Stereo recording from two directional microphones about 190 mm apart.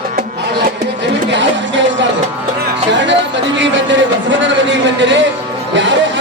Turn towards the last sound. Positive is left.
turn(degrees=-75)  # may be behind; listen again after turning